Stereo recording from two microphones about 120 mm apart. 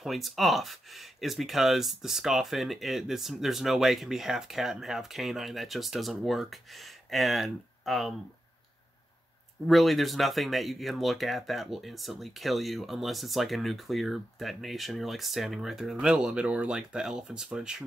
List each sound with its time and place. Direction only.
0.0 s speech: centre (ahead or behind)
9.7 s speech: centre (ahead or behind)